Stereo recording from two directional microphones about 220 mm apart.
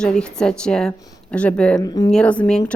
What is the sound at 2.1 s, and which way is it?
Speech, 5° left (ahead or behind).